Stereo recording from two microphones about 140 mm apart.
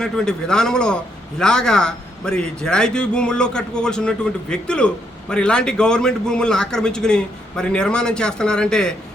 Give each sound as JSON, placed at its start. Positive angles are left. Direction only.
{"t": 0.0, "sound": "a man's voice", "side_deg": 5}